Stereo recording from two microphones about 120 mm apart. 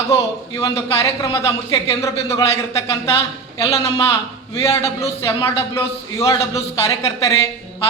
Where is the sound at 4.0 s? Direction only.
25° left (ahead or behind).